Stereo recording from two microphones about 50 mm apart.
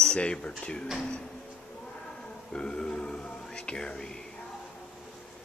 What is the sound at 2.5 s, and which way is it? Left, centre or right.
Speech, centre.